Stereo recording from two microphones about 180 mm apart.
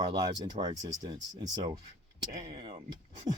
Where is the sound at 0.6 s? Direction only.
25° right (ahead or behind).